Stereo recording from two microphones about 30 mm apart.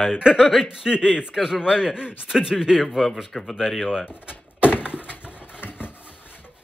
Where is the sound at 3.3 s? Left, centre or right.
Centre.